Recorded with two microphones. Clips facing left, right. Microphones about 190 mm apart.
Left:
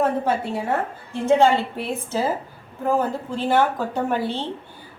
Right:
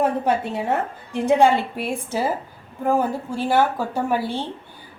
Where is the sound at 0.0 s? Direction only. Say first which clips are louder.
Right 1 dB; 20° right (ahead or behind).